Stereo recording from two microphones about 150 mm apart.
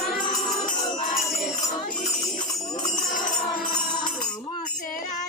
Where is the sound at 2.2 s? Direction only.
25° left (ahead or behind).